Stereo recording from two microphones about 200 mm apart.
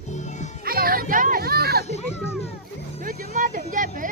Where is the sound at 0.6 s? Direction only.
45° right (ahead or behind).